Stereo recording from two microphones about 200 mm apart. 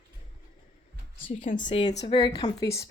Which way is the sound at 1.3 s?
40° left (ahead or behind).